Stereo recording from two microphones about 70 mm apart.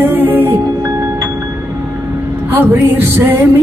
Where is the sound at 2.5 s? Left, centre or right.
Right.